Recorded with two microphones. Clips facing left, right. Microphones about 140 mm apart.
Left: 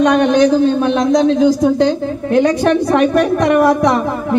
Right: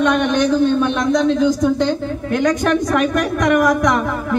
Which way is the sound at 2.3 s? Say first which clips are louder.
Left 4 dB; 30° left (ahead or behind).